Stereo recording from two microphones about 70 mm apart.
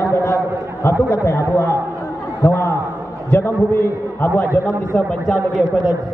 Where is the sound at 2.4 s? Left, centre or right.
Left.